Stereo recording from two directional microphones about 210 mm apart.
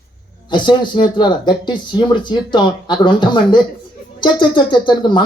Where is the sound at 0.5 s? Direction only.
20° left (ahead or behind).